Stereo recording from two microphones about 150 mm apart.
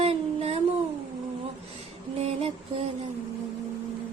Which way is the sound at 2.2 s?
40° right (ahead or behind).